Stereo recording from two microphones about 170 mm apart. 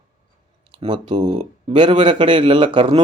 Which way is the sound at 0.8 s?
30° right (ahead or behind).